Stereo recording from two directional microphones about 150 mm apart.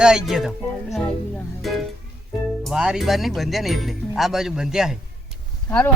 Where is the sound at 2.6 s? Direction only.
5° right (ahead or behind).